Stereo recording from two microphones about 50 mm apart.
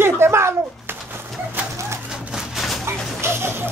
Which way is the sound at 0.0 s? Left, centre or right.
Right.